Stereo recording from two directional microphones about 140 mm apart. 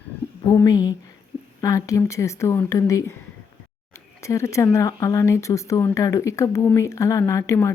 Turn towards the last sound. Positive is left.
turn(degrees=20)  # may be behind; listen again after turning